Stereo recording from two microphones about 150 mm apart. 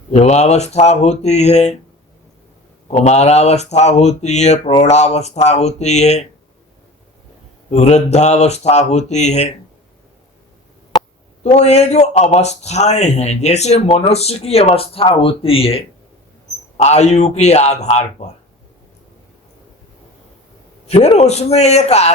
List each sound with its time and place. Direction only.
0.1 s speech: 45° left (ahead or behind)
2.9 s speech: 45° left (ahead or behind)
7.7 s speech: 50° left (ahead or behind)
11.4 s speech: 50° left (ahead or behind)
20.8 s speech: 45° left (ahead or behind)